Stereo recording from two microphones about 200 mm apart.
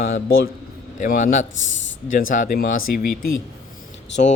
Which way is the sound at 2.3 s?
40° left (ahead or behind).